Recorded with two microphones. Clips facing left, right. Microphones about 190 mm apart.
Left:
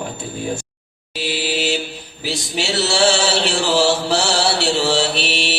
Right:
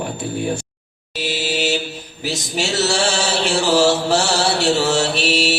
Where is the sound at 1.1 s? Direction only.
45° right (ahead or behind).